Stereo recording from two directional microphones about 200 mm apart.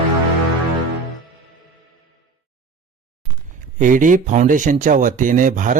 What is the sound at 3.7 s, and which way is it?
Speech, 40° right (ahead or behind).